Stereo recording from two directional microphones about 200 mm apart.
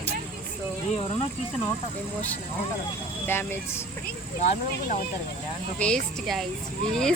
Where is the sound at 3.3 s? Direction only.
10° left (ahead or behind).